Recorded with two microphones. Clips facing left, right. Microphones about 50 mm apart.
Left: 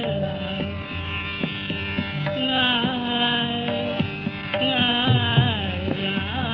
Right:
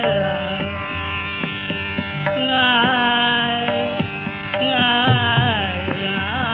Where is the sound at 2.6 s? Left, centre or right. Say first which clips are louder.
Right 7 dB; right.